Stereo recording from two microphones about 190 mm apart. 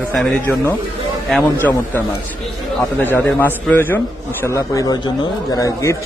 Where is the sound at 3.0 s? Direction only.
10° left (ahead or behind).